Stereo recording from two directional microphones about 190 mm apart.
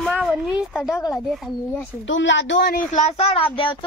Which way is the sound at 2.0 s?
75° left (ahead or behind).